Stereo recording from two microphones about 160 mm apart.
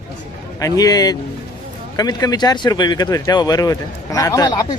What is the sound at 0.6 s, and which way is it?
Speech, 20° left (ahead or behind).